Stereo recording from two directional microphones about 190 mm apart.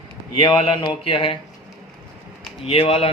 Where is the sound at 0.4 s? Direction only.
25° left (ahead or behind).